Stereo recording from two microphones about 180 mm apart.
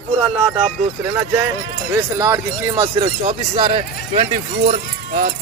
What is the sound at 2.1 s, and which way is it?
Speech, 15° right (ahead or behind).